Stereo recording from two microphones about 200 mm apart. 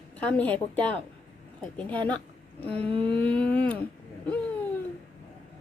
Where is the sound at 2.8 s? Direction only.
25° right (ahead or behind).